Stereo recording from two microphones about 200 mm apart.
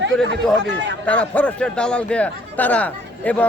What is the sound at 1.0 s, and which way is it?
A man's voice, 5° left (ahead or behind).